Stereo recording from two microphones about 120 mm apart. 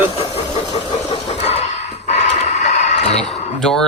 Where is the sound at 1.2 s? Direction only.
60° left (ahead or behind).